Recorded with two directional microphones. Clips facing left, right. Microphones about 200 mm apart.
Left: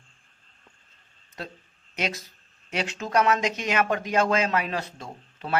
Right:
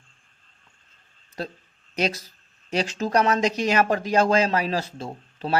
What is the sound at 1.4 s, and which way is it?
Speech, 35° right (ahead or behind).